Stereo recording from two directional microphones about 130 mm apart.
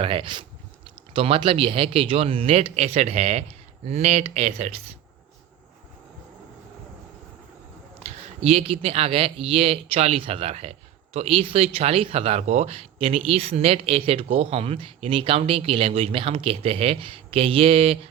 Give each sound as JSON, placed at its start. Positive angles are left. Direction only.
{"t": 0.0, "sound": "speech", "side_deg": -45}
{"t": 8.0, "sound": "speech", "side_deg": -50}